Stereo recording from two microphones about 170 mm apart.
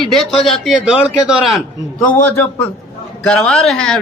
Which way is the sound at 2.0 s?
10° left (ahead or behind).